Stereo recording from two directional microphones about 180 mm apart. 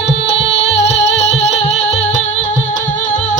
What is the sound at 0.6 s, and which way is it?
Music, 35° left (ahead or behind).